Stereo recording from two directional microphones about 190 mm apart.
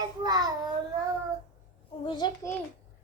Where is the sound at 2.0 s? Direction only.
25° left (ahead or behind).